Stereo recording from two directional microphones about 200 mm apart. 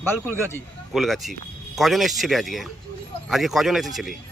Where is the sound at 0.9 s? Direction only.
Centre (ahead or behind).